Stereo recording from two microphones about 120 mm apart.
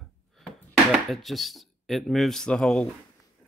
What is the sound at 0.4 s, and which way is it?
Speech, 5° left (ahead or behind).